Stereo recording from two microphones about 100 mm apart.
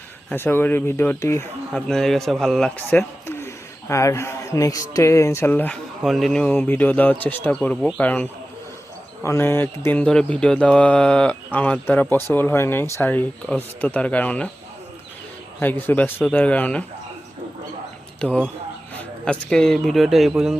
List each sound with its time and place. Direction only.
0.3 s speech: 20° left (ahead or behind)
1.7 s speech: 5° left (ahead or behind)
3.2 s speech: 25° left (ahead or behind)
6.0 s speech: centre (ahead or behind)
6.4 s mantra: 15° left (ahead or behind)
9.2 s mantra: 25° left (ahead or behind)
15.6 s speech: 20° left (ahead or behind)
16.2 s mantra: 15° left (ahead or behind)
18.2 s mantra: 10° left (ahead or behind)
18.9 s speech: 10° left (ahead or behind)